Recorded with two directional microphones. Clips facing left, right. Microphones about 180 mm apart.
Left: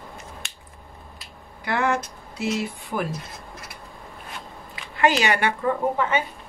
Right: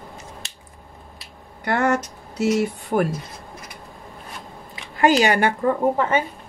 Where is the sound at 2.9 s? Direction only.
45° right (ahead or behind).